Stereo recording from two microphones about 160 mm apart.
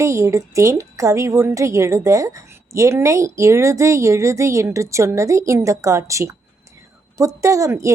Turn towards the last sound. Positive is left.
turn(degrees=-20)  # may be behind; listen again after turning